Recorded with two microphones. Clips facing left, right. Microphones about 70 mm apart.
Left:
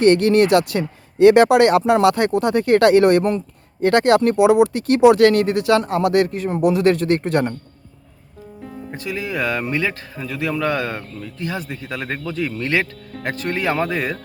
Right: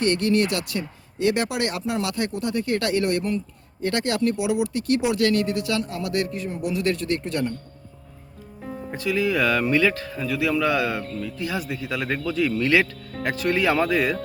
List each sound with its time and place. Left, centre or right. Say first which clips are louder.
0.0 s speech: left 8 dB; left
9.0 s speech: right 2 dB; left